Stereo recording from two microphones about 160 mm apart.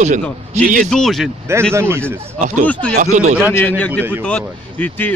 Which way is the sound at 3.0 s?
50° right (ahead or behind).